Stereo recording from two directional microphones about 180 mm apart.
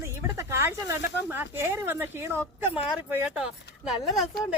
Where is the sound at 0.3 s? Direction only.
15° right (ahead or behind).